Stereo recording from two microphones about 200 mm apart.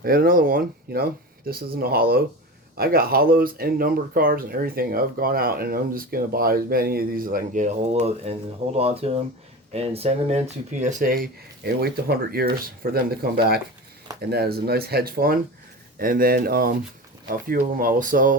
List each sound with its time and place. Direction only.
0.0 s speech: 45° right (ahead or behind)